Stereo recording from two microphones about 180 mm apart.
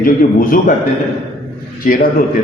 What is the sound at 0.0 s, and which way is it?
Speech, 50° left (ahead or behind).